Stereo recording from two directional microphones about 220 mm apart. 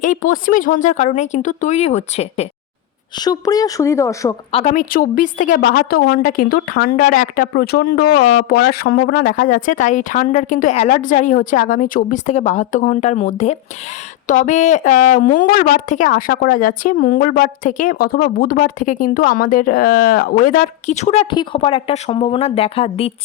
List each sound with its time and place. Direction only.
0.0 s a woman's voice: 35° left (ahead or behind)
3.2 s a woman's voice: 15° left (ahead or behind)
4.5 s a woman's voice: 35° left (ahead or behind)